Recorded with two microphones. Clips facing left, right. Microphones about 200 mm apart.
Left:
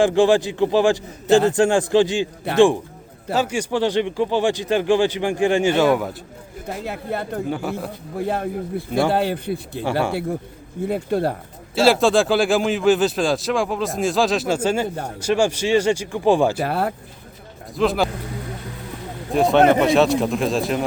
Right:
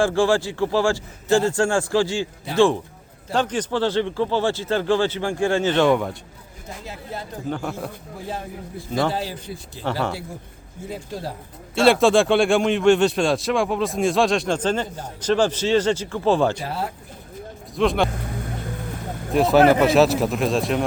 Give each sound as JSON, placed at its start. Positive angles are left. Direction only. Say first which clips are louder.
{"t": 0.0, "sound": "a man's voice", "louder": "left 3 dB", "side_deg": 20}
{"t": 2.5, "sound": "speech", "louder": "left 4 dB", "side_deg": 60}
{"t": 3.3, "sound": "speech", "louder": "left 1 dB", "side_deg": 10}
{"t": 6.7, "sound": "speech", "louder": "left 7 dB", "side_deg": 60}
{"t": 7.5, "sound": "a man's voice", "louder": "left 2 dB", "side_deg": 5}
{"t": 8.1, "sound": "speech", "louder": "left 13 dB", "side_deg": 60}
{"t": 10.8, "sound": "speech", "louder": "left 10 dB", "side_deg": 60}
{"t": 11.7, "sound": "a man's voice", "louder": "even", "side_deg": 0}
{"t": 16.6, "sound": "speech", "louder": "left 6 dB", "side_deg": 60}
{"t": 17.7, "sound": "a man's voice", "louder": "even", "side_deg": 0}
{"t": 19.3, "sound": "a man's voice", "louder": "even", "side_deg": 0}